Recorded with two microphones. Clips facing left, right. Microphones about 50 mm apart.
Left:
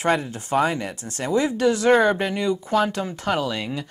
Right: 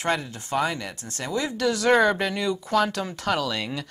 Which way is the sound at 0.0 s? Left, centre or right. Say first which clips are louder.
Left 4 dB; centre.